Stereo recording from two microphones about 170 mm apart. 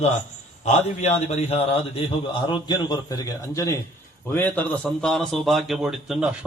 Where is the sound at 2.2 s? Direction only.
25° left (ahead or behind).